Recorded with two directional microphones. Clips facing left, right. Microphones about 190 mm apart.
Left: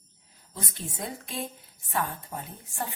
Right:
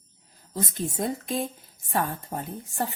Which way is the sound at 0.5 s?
40° right (ahead or behind).